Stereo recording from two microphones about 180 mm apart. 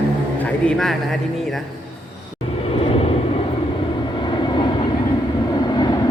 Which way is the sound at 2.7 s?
30° left (ahead or behind).